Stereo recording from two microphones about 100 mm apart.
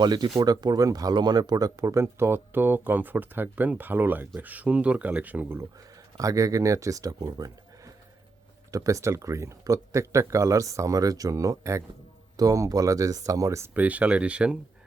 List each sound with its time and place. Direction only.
0.0 s speech: 45° right (ahead or behind); by 5.6 s 20° right (ahead or behind)
6.1 s speech: 35° right (ahead or behind)
13.7 s speech: 15° right (ahead or behind)